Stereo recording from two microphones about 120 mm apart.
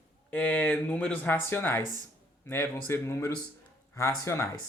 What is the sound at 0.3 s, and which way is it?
Speech, 15° left (ahead or behind).